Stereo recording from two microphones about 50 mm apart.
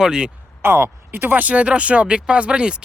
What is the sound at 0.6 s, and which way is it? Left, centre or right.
Speech, right.